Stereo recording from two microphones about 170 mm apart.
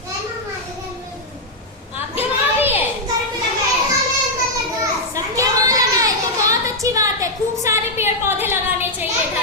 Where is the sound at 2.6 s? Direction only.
10° right (ahead or behind).